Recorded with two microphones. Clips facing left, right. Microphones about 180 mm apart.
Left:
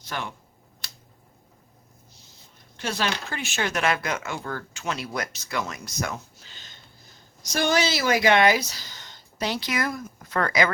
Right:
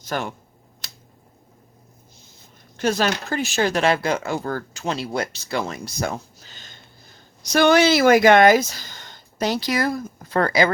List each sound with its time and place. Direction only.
0.0 s speech: 45° right (ahead or behind)
2.7 s speech: 45° right (ahead or behind)
7.4 s speech: 65° right (ahead or behind); by 10.7 s 30° right (ahead or behind)